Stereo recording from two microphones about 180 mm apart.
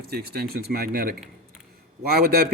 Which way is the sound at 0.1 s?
60° right (ahead or behind).